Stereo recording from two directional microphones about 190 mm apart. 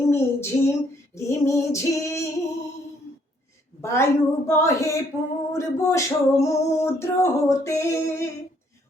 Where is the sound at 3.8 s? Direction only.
15° left (ahead or behind).